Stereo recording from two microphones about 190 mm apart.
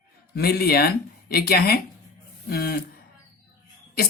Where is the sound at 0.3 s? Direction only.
55° left (ahead or behind).